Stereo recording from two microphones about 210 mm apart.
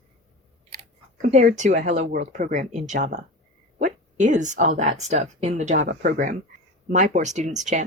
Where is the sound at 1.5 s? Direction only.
35° right (ahead or behind).